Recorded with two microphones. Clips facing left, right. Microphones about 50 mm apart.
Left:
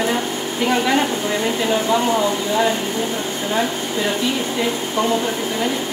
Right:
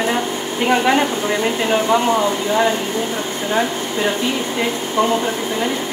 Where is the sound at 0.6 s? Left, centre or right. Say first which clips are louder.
Right 2 dB; right.